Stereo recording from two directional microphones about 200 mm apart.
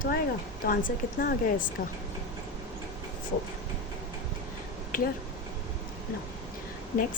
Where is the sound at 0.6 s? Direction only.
45° left (ahead or behind).